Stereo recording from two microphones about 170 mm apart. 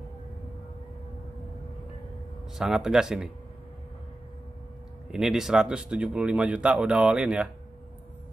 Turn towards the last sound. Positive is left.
turn(degrees=-5)  # may be behind; listen again after turning